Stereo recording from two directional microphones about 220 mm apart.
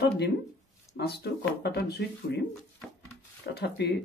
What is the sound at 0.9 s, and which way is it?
Speech, 45° left (ahead or behind).